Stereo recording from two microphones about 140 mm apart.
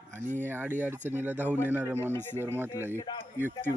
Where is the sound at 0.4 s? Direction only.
15° right (ahead or behind).